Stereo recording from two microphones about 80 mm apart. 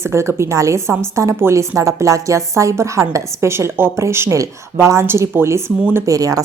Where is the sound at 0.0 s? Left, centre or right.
Right.